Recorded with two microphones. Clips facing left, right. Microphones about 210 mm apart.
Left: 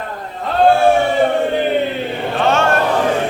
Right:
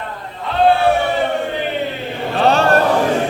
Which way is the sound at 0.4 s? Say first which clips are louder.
Left 2 dB; 45° left (ahead or behind).